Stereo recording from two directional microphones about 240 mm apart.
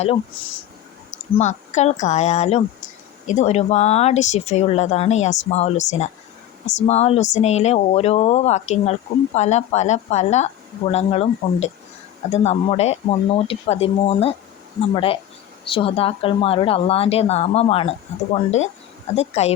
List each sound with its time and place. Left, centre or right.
1.1 s speech: left
19.1 s speech: left